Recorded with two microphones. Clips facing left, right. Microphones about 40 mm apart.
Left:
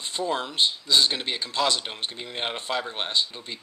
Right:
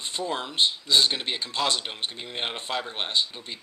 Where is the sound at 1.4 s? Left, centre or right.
Right.